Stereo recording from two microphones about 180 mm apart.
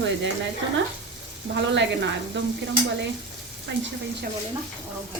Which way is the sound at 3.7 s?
80° right.